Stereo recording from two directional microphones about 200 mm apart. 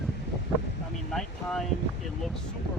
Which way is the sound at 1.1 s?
Centre (ahead or behind).